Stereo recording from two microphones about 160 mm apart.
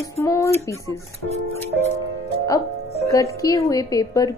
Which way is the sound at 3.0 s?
20° left (ahead or behind).